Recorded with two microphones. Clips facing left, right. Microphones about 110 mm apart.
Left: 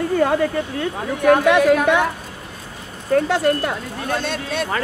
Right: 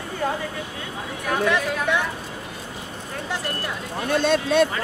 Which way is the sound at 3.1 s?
65° left (ahead or behind).